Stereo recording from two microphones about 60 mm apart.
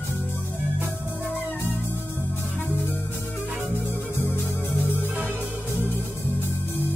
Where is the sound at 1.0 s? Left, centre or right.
Left.